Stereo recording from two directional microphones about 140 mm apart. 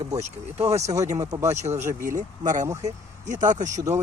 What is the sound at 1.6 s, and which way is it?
Speech, 55° right (ahead or behind).